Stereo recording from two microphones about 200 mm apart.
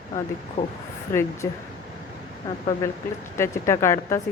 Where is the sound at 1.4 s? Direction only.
15° left (ahead or behind).